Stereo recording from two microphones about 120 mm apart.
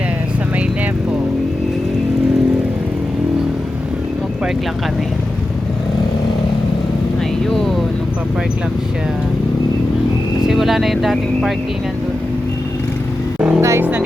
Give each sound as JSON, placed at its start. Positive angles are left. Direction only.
{"t": 10.4, "sound": "speech", "side_deg": 0}
{"t": 13.6, "sound": "vehicle", "side_deg": -20}